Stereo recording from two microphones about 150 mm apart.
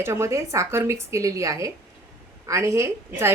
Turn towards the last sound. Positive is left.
turn(degrees=-20)  # may be behind; listen again after turning